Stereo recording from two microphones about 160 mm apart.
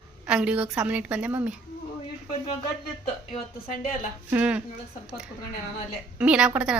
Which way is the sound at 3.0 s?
45° left (ahead or behind).